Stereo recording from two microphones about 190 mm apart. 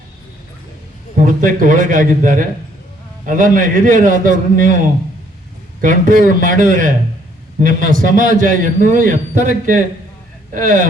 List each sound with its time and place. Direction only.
1.2 s a man's voice: 45° right (ahead or behind)